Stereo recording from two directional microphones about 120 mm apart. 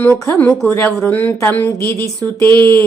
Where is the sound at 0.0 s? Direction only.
15° left (ahead or behind).